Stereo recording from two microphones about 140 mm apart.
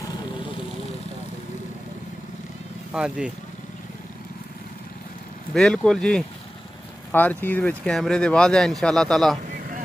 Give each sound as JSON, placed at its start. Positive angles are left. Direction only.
{"t": 0.0, "sound": "vehicle", "side_deg": 30}
{"t": 2.9, "sound": "speech", "side_deg": -5}
{"t": 5.5, "sound": "speech", "side_deg": 5}